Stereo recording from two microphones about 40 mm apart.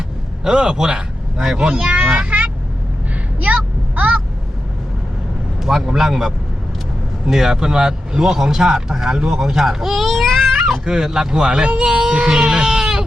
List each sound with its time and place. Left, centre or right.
0.4 s a man's voice: centre
2.3 s vehicle: right
3.4 s a sound: right
5.7 s speech: centre
10.8 s speech: centre
11.9 s a sound: centre
12.1 s goat: centre